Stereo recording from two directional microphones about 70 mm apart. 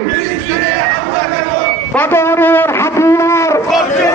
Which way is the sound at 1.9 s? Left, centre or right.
Left.